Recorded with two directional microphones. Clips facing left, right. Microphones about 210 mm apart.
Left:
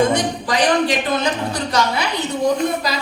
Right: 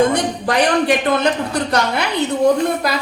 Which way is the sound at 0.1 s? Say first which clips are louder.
Right 1 dB; 55° right (ahead or behind).